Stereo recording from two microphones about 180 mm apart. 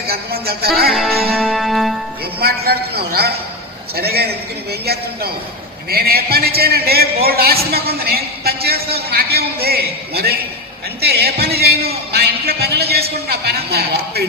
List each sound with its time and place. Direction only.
0.1 s a man's voice: 60° right (ahead or behind)
0.9 s music: centre (ahead or behind)
2.4 s a man's voice: 60° right (ahead or behind)